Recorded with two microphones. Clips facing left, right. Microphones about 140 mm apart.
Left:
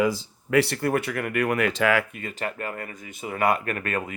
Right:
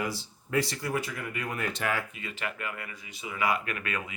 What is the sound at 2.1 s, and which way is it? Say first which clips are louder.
Speech: left 5 dB; 45° left (ahead or behind).